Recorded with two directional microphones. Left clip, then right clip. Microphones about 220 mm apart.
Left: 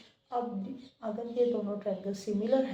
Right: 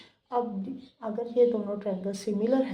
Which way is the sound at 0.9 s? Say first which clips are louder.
Right 6 dB; 45° right (ahead or behind).